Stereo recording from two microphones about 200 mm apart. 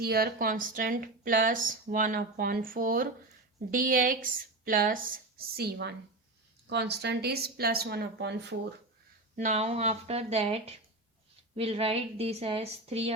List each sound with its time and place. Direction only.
0.0 s speech: 50° right (ahead or behind)
9.3 s a woman's voice: 35° right (ahead or behind)